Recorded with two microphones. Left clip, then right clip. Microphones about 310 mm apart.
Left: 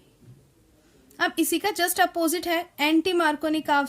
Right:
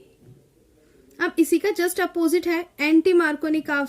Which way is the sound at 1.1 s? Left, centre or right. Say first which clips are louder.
Right 4 dB; centre.